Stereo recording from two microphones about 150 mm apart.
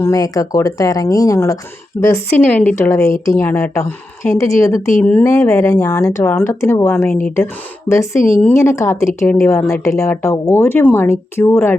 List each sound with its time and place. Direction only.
0.0 s a woman's voice: 25° left (ahead or behind)